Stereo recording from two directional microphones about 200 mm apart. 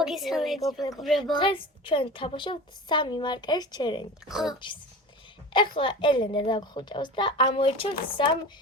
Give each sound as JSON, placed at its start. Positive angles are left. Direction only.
{"t": 0.0, "sound": "a woman's voice", "side_deg": 0}
{"t": 0.6, "sound": "a woman's voice", "side_deg": 15}
{"t": 4.3, "sound": "a woman's voice", "side_deg": 0}
{"t": 5.5, "sound": "a woman's voice", "side_deg": 25}